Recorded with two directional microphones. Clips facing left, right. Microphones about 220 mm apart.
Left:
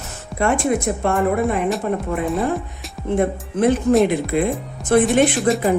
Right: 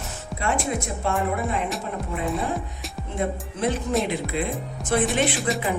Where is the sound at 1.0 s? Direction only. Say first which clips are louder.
Left 6 dB; 55° left (ahead or behind).